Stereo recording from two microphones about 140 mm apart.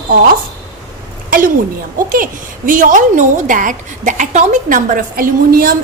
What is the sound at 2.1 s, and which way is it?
A woman's voice, 70° right (ahead or behind).